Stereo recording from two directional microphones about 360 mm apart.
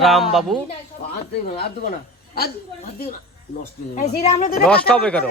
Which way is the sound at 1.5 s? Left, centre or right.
Left.